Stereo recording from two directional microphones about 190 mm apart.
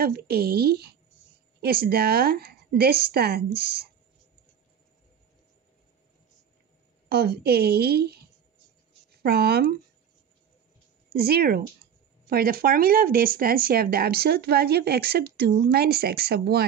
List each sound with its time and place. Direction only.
0.0 s a woman's voice: 55° right (ahead or behind)
7.1 s a woman's voice: 55° right (ahead or behind)
11.1 s a woman's voice: 55° right (ahead or behind)